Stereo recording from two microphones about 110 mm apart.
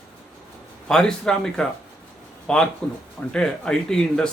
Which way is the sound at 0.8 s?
5° left (ahead or behind).